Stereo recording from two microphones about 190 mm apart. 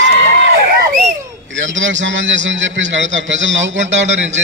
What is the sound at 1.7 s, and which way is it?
A man's voice, 80° right.